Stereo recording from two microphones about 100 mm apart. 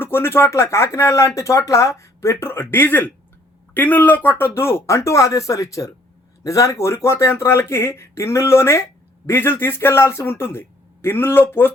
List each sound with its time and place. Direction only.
0.0 s speech: 25° left (ahead or behind)